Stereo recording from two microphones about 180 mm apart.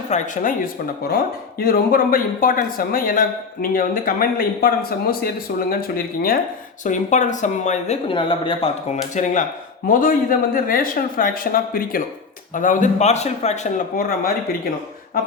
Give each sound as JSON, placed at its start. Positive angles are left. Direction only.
{"t": 0.1, "sound": "speech", "side_deg": 50}
{"t": 6.8, "sound": "speech", "side_deg": 45}